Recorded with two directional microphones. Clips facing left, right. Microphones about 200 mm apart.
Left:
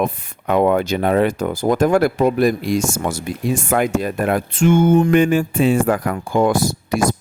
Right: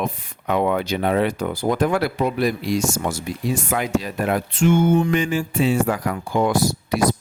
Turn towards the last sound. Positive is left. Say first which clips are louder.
# left 1 dB
turn(degrees=50)  # may be behind; listen again after turning